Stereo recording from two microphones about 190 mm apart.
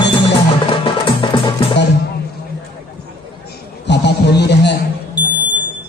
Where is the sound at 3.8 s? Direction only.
65° left (ahead or behind).